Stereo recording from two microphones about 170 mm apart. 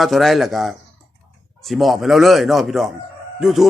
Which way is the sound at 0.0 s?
Centre (ahead or behind).